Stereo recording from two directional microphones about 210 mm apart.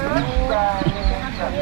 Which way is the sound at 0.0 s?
20° right (ahead or behind).